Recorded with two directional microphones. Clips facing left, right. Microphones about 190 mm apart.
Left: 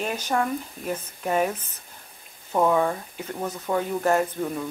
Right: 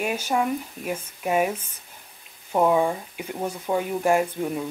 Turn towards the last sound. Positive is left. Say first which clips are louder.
# right 1 dB
turn(degrees=-15)  # may be behind; listen again after turning